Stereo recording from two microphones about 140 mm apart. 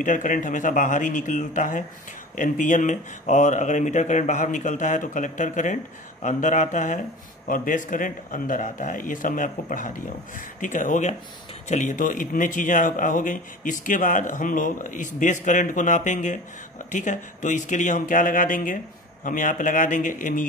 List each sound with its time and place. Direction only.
0.0 s speech: 65° left (ahead or behind)
7.4 s speech: 75° left (ahead or behind)